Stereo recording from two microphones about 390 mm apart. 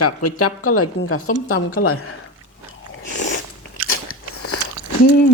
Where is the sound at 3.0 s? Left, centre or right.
Left.